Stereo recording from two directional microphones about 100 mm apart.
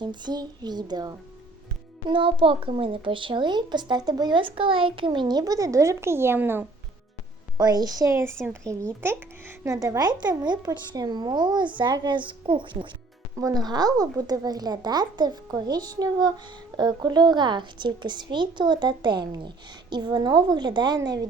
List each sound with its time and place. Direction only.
0.0 s speech: 50° right (ahead or behind)
2.0 s speech: 60° right (ahead or behind); by 6.7 s 20° right (ahead or behind)
7.6 s speech: 40° right (ahead or behind)
13.4 s speech: 40° right (ahead or behind)